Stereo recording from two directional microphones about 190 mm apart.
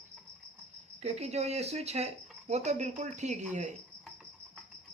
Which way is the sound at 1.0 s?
35° right (ahead or behind).